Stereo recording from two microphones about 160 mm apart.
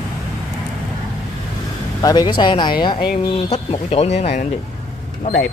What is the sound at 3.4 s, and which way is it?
Speech, 40° left (ahead or behind).